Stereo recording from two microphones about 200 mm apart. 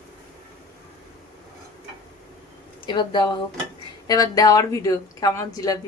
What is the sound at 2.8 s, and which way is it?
A woman's voice, 25° left (ahead or behind).